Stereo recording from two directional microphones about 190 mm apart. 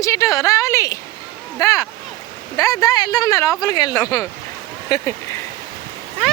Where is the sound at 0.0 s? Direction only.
15° left (ahead or behind).